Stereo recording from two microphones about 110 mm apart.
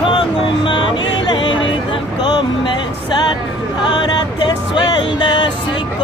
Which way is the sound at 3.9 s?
45° left (ahead or behind).